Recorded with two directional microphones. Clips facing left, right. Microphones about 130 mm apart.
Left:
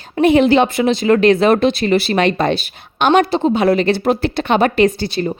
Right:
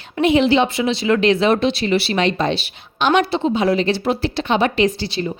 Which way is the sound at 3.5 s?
60° left (ahead or behind).